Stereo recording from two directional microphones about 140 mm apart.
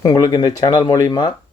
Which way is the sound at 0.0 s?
25° left (ahead or behind).